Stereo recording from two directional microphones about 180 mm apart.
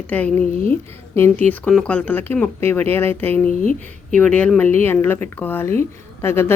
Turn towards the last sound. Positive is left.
turn(degrees=15)  # may be behind; listen again after turning